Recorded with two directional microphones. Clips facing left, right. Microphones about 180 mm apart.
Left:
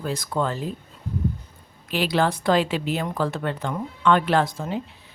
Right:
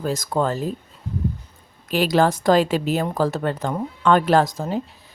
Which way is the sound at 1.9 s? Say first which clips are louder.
Right 4 dB; 45° right (ahead or behind).